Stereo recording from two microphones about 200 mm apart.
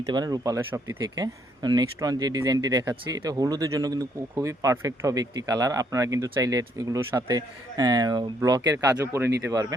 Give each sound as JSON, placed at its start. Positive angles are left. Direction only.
{"t": 0.1, "sound": "speech", "side_deg": -20}